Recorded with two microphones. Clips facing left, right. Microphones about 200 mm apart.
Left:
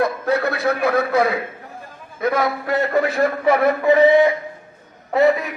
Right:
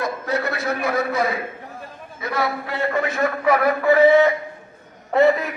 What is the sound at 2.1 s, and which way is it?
A man's voice, 50° left (ahead or behind).